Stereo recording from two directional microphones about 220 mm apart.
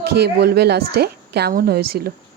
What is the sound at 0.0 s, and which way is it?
A woman's voice, 45° right (ahead or behind).